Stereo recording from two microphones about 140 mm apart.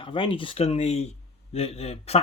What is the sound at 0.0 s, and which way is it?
Speech, 35° left (ahead or behind).